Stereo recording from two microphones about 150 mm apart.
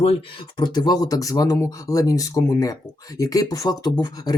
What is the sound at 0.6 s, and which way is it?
Speech, 30° left (ahead or behind).